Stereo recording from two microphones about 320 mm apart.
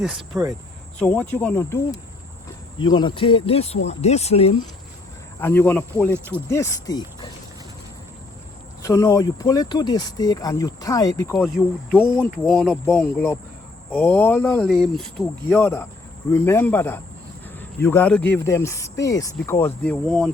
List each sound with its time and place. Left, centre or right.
0.0 s speech: centre
0.9 s speech: centre
5.4 s speech: centre
6.1 s speech: centre
6.5 s speech: centre
8.8 s speech: centre
11.3 s speech: centre